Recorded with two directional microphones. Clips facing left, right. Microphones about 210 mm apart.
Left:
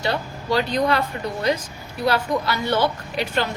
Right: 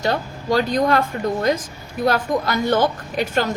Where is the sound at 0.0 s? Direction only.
45° right (ahead or behind).